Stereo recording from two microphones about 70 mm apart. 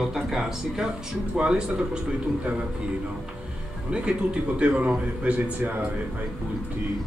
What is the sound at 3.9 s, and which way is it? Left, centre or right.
Speech, centre.